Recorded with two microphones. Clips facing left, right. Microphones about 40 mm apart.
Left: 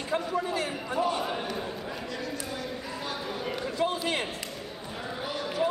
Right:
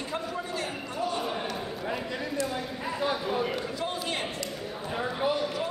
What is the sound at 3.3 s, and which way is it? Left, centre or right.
Speech, centre.